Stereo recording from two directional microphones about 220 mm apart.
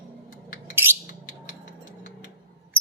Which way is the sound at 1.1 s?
35° left (ahead or behind).